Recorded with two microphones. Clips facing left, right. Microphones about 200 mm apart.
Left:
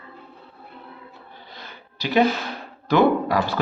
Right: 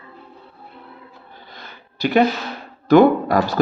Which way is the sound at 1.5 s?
50° right (ahead or behind).